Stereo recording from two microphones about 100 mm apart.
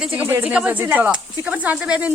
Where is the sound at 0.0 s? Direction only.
15° right (ahead or behind).